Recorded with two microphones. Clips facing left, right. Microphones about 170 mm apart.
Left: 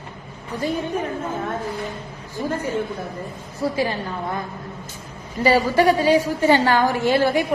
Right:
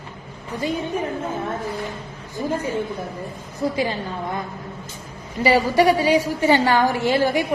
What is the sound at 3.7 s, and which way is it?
Speech, 20° right (ahead or behind).